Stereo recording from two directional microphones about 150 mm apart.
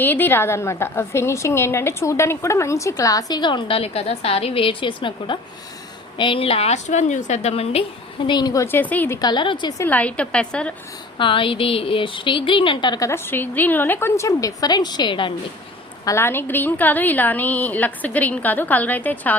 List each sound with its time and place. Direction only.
0.0 s a woman's voice: 10° left (ahead or behind); by 7.9 s 40° left (ahead or behind)
8.3 s a woman's voice: 30° left (ahead or behind)
8.6 s a woman's voice: 10° left (ahead or behind)
9.2 s a woman's voice: 30° left (ahead or behind)
9.8 s a woman's voice: 10° left (ahead or behind)
11.2 s a woman's voice: 35° left (ahead or behind)
13.1 s a woman's voice: 15° left (ahead or behind); by 15.3 s 30° left (ahead or behind)
16.0 s a woman's voice: 15° left (ahead or behind)